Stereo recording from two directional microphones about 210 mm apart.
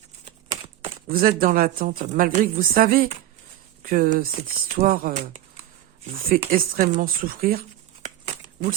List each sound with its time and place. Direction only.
1.0 s a woman's voice: 45° right (ahead or behind)
6.1 s a woman's voice: 45° right (ahead or behind)